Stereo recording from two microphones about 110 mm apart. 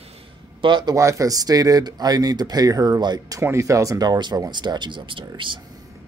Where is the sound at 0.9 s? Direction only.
30° right (ahead or behind).